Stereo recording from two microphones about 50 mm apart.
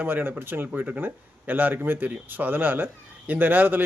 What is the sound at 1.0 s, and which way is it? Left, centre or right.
A man's voice, right.